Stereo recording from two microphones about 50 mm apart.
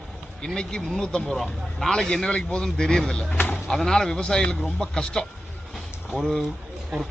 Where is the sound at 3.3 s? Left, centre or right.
Left.